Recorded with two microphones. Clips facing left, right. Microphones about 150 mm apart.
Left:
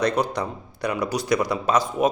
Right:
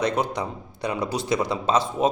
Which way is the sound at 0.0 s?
20° right (ahead or behind).